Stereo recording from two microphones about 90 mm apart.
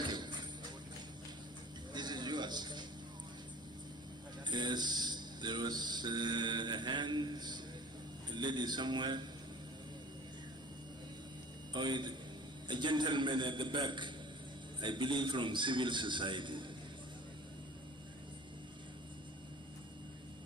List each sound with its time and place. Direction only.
0.0 s music: 55° right (ahead or behind)
1.9 s a sound: 55° right (ahead or behind)
4.4 s a man's voice: 55° right (ahead or behind)
11.7 s a man's voice: 55° right (ahead or behind)